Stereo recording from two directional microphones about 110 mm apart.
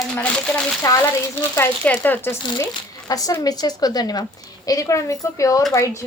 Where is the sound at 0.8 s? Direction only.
30° left (ahead or behind).